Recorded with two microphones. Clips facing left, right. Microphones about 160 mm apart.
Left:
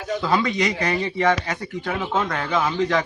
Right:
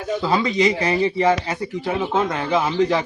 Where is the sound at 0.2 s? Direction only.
30° right (ahead or behind).